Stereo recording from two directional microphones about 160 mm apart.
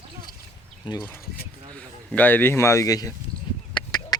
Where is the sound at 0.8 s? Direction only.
30° left (ahead or behind).